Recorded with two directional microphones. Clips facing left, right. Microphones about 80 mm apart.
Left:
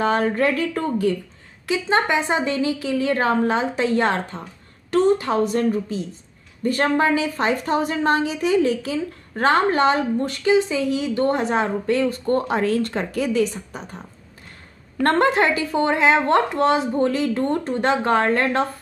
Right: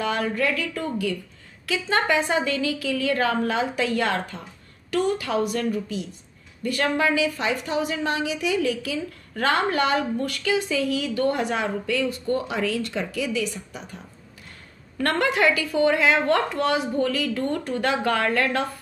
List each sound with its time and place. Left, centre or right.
0.0 s a woman's voice: left
1.7 s a woman's voice: left
15.0 s a woman's voice: left